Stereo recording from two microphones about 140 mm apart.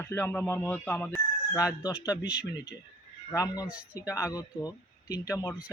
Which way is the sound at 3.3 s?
25° left (ahead or behind).